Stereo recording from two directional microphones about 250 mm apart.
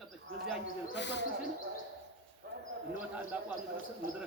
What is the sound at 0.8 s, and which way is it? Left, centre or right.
Speech, left.